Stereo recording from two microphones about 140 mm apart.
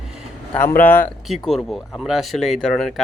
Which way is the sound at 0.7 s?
75° left (ahead or behind).